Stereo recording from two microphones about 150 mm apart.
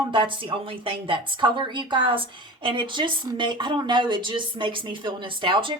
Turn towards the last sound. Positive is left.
turn(degrees=-30)  # may be behind; listen again after turning